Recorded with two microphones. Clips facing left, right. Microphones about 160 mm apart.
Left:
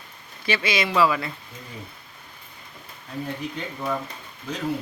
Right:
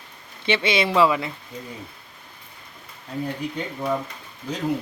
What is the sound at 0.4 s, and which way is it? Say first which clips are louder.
Speech: right 3 dB; 25° right (ahead or behind).